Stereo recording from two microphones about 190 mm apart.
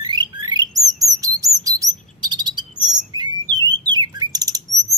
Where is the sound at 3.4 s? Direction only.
20° right (ahead or behind).